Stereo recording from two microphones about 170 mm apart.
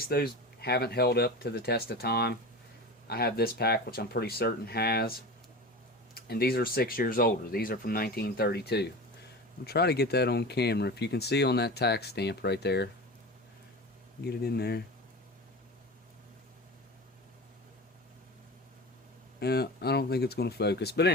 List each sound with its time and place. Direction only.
0.1 s speech: 70° left (ahead or behind)
6.1 s speech: 65° left (ahead or behind)
14.2 s speech: 70° left (ahead or behind)
19.4 s speech: 70° left (ahead or behind)